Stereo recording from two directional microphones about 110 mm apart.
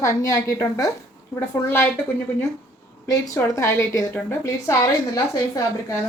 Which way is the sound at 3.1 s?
30° left (ahead or behind).